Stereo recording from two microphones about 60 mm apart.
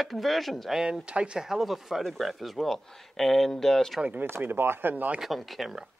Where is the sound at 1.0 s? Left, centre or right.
Centre.